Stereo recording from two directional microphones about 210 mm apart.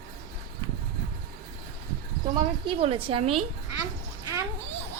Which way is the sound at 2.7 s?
25° right (ahead or behind).